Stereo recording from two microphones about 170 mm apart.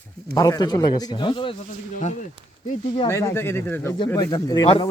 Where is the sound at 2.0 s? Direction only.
45° left (ahead or behind).